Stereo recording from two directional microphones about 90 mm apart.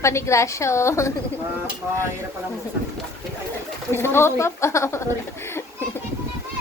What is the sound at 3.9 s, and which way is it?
A woman's voice, 25° left (ahead or behind).